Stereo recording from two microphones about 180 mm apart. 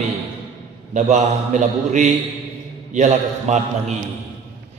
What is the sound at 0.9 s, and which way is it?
A man's voice, 40° right (ahead or behind).